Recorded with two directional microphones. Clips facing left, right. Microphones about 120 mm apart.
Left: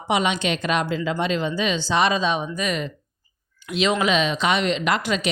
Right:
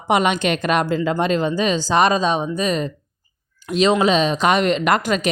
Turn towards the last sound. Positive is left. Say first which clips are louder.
# right 4 dB
turn(degrees=-45)  # may be behind; listen again after turning